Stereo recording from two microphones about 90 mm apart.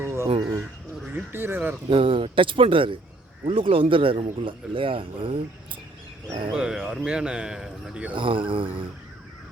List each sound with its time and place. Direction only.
0.0 s a sound: 30° right (ahead or behind)
1.0 s speech: 20° right (ahead or behind)
1.9 s speech: 80° right
3.4 s speech: 90° right
6.5 s speech: 10° right (ahead or behind)
8.1 s speech: 70° right (ahead or behind)